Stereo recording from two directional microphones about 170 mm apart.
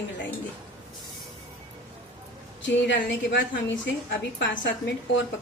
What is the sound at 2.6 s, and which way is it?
A woman's voice, 90° left.